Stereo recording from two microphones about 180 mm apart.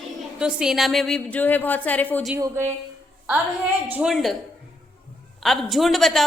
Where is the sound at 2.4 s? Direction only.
15° right (ahead or behind).